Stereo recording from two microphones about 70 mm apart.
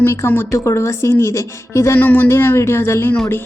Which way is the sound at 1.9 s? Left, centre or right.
Left.